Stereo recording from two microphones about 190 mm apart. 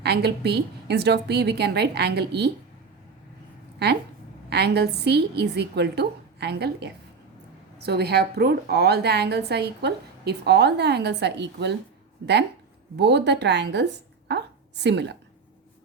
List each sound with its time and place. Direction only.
0.0 s a woman's voice: 60° right (ahead or behind)
4.4 s a woman's voice: 60° right (ahead or behind)